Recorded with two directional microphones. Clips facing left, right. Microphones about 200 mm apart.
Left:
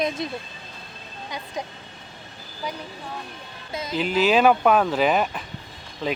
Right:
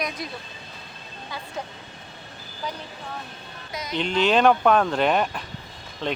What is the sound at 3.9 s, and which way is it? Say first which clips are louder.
Speech: left 1 dB; 5° left (ahead or behind).